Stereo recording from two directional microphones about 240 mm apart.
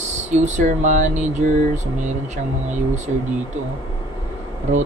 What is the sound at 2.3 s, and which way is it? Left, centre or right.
Speech, right.